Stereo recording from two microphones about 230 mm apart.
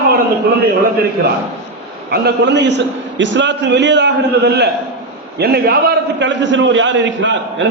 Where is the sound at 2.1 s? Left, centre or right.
Right.